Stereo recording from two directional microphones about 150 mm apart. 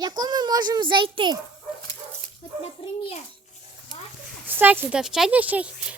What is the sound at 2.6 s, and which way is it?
Speech, 45° left (ahead or behind).